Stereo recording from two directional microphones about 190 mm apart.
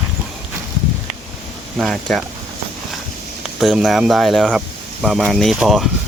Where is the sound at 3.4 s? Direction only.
5° right (ahead or behind).